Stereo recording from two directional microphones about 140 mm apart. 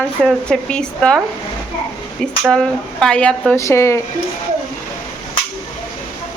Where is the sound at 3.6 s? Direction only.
20° left (ahead or behind).